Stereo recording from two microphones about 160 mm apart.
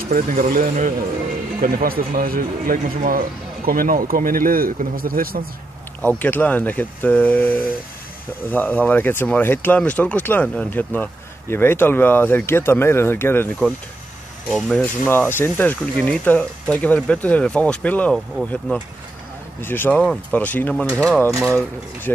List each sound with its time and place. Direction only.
0.1 s speech: 60° right (ahead or behind)
5.9 s speech: 10° left (ahead or behind)
14.5 s speech: 5° left (ahead or behind)
21.3 s speech: 20° right (ahead or behind)